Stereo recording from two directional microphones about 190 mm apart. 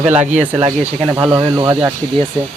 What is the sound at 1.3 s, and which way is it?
Speech, 15° right (ahead or behind).